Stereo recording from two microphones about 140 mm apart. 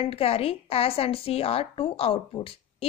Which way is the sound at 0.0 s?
45° left (ahead or behind).